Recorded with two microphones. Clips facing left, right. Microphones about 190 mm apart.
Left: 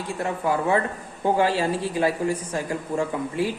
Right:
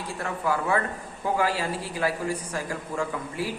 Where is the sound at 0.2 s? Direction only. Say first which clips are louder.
Left 3 dB; 20° left (ahead or behind).